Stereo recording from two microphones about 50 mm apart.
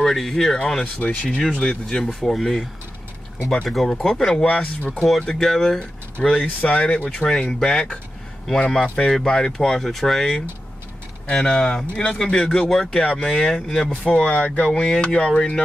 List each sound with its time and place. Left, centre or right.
0.0 s speech: centre
0.9 s speech: left
1.5 s speech: centre
3.6 s speech: centre
3.9 s speech: centre
4.5 s speech: left
5.2 s speech: centre
5.8 s speech: left; by 10.3 s centre
11.3 s speech: centre
14.7 s speech: centre